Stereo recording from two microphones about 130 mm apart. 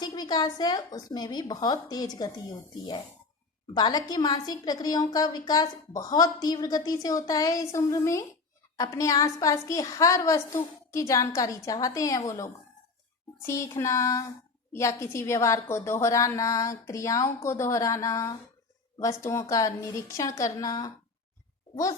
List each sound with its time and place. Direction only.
0.0 s a woman's voice: 30° left (ahead or behind)